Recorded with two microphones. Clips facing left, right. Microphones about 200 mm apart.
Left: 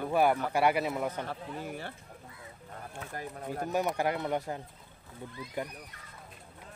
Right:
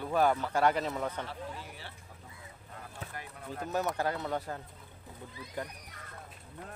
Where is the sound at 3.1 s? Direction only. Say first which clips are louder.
Left 7 dB; 45° left (ahead or behind).